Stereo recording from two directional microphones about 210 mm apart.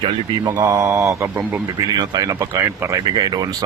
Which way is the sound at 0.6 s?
10° right (ahead or behind).